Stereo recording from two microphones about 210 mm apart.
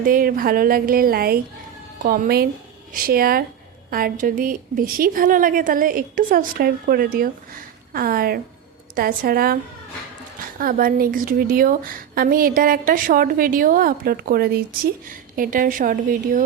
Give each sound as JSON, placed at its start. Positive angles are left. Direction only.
{"t": 0.0, "sound": "a woman's voice", "side_deg": -40}
{"t": 10.6, "sound": "a woman's voice", "side_deg": -40}